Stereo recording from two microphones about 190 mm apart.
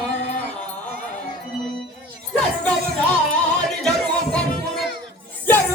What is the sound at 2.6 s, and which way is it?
Music, 5° left (ahead or behind).